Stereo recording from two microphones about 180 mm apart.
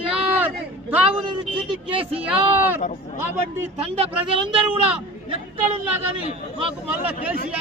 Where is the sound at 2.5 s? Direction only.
10° right (ahead or behind).